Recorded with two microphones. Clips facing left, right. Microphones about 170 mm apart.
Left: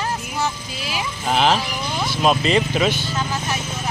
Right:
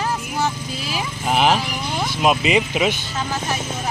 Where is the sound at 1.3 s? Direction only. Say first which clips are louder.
Right 1 dB; 10° right (ahead or behind).